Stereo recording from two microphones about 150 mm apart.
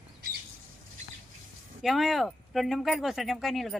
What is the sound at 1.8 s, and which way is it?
Speech, centre (ahead or behind).